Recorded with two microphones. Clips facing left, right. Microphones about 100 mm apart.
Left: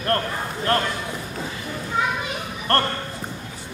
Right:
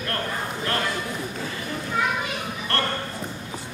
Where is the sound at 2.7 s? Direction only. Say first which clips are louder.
Left 6 dB; 40° left (ahead or behind).